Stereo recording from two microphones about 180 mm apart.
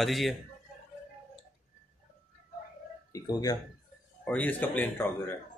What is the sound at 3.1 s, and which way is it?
Speech, 20° left (ahead or behind).